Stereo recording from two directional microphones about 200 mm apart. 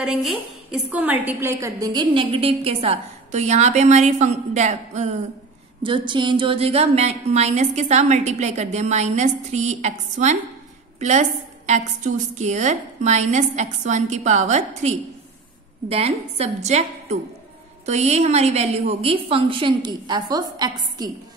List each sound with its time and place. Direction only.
0.0 s a woman's voice: 5° right (ahead or behind); by 5.1 s 35° right (ahead or behind)
5.8 s a woman's voice: 25° right (ahead or behind)